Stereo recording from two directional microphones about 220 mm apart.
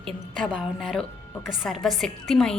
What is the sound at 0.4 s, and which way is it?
A woman's voice, centre (ahead or behind).